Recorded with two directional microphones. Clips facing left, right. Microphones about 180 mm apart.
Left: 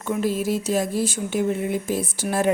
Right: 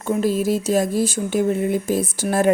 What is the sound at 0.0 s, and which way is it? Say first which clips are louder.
Speech: right 4 dB; 40° right (ahead or behind).